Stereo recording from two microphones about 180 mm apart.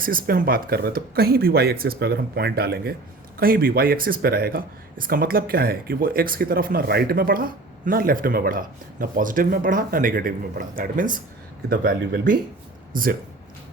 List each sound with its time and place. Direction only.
0.0 s speech: 50° right (ahead or behind)
11.9 s speech: 60° right (ahead or behind)